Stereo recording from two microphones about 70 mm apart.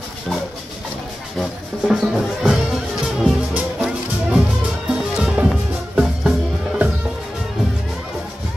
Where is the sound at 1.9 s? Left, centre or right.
Centre.